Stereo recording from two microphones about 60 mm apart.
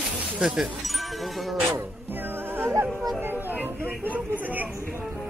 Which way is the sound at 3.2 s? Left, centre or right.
Right.